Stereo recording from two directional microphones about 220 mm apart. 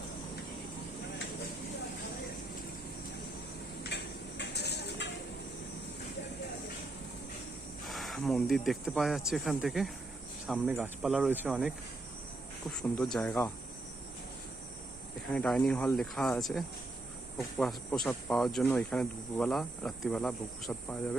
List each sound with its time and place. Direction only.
3.8 s a sound: 50° left (ahead or behind)
7.9 s speech: centre (ahead or behind)
12.7 s speech: centre (ahead or behind)
15.3 s speech: 5° left (ahead or behind)